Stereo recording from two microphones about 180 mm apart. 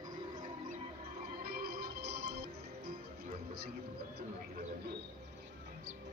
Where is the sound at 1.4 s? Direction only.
55° right (ahead or behind).